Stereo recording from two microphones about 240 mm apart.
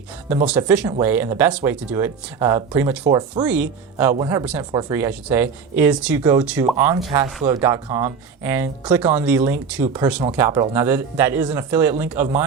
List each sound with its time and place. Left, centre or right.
0.4 s speech: centre
3.4 s speech: centre
7.3 s speech: centre
7.5 s speech: centre